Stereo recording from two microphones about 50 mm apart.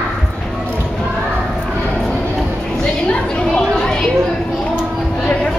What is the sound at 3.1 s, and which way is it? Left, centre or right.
Chatter, centre.